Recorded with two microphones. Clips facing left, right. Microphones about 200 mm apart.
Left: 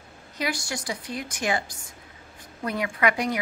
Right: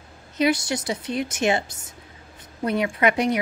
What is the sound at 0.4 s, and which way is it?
Speech, 20° right (ahead or behind).